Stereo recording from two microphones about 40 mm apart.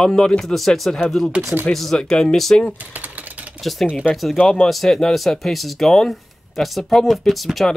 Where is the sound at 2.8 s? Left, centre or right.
Right.